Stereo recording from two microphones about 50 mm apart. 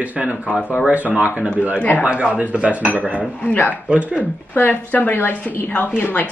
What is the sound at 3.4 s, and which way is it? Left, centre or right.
Speech, left.